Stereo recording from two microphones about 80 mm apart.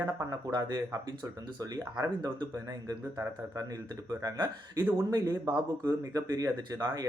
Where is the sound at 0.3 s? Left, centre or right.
Right.